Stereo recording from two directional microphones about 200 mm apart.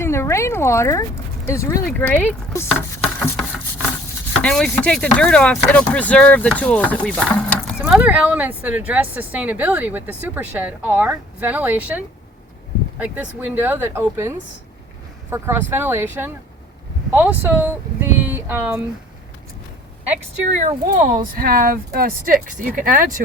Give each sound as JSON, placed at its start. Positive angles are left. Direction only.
{"t": 0.0, "sound": "speech", "side_deg": 15}
{"t": 4.4, "sound": "speech", "side_deg": 5}
{"t": 7.8, "sound": "speech", "side_deg": -5}
{"t": 20.6, "sound": "speech", "side_deg": -40}